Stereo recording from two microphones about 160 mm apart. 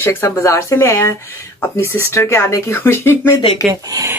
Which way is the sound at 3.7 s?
20° right (ahead or behind).